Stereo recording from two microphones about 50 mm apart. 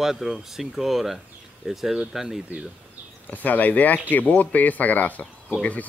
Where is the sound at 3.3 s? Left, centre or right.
Left.